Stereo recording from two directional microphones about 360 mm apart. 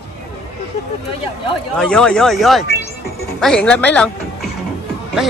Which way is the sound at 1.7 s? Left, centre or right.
Centre.